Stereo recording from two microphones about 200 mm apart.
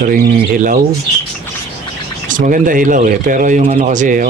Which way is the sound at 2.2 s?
40° right (ahead or behind).